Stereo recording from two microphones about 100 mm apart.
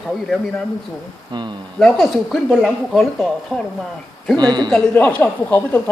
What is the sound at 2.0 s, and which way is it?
A woman's voice, 5° right (ahead or behind).